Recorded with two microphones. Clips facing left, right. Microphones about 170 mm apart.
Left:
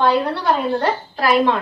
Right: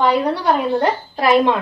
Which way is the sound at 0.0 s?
15° right (ahead or behind).